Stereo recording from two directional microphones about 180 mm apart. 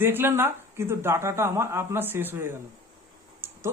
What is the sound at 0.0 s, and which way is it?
A man's voice, 10° right (ahead or behind).